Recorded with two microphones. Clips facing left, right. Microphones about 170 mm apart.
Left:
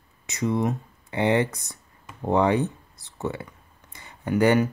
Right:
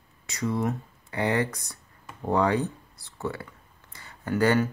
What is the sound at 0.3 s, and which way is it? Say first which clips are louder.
Speech: left 3 dB; 20° left (ahead or behind).